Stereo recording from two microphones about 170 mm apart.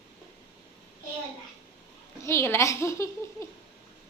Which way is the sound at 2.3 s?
15° left (ahead or behind).